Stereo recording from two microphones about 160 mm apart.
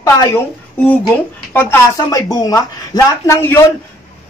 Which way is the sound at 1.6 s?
15° left (ahead or behind).